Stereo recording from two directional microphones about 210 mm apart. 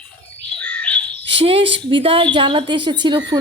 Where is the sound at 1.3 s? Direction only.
25° right (ahead or behind).